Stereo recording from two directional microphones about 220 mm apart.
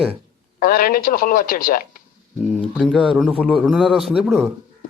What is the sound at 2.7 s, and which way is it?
A man's voice, centre (ahead or behind).